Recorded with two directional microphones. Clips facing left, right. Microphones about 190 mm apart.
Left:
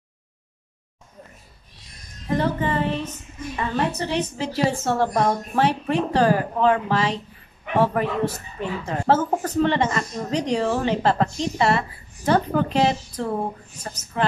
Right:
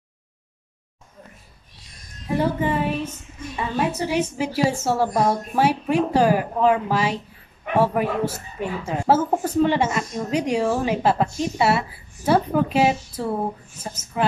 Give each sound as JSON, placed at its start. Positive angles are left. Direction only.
{"t": 2.3, "sound": "speech", "side_deg": -10}